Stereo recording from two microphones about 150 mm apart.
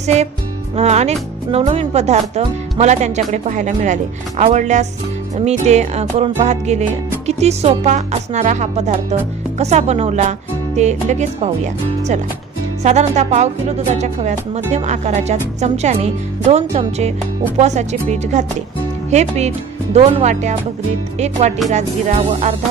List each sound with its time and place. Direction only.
0.0 s music: 50° right (ahead or behind)
0.7 s speech: 45° right (ahead or behind)